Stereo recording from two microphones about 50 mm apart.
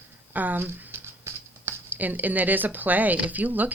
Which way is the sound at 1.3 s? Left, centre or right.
Right.